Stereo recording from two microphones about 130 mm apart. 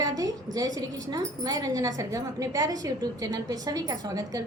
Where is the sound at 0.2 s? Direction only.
30° right (ahead or behind).